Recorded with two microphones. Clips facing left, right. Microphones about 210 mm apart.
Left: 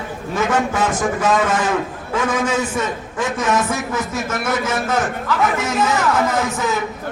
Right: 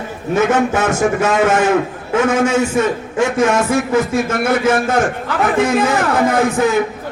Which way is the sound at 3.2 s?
55° right (ahead or behind).